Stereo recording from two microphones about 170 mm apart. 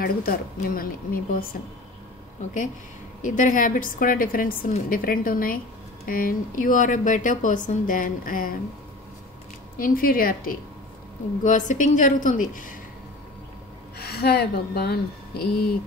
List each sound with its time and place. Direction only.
0.0 s a woman's voice: 60° left (ahead or behind)
3.2 s a woman's voice: 50° left (ahead or behind)
9.8 s a woman's voice: 55° left (ahead or behind)
13.9 s speech: 70° left (ahead or behind)